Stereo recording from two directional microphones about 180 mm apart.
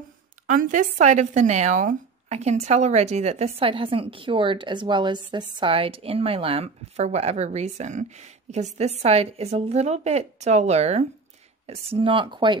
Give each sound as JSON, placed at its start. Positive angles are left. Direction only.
{"t": 0.5, "sound": "speech", "side_deg": -45}